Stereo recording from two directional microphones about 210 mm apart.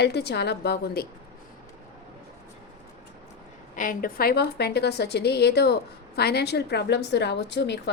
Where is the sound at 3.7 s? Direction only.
40° left (ahead or behind); by 7.9 s 55° left (ahead or behind).